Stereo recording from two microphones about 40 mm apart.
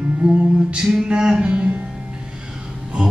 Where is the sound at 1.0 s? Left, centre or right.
Right.